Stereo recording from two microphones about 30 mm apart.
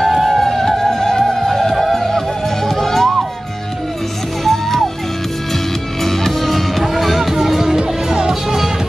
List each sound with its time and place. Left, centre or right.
0.0 s music: centre
4.5 s music: centre
6.0 s music: centre
7.7 s music: right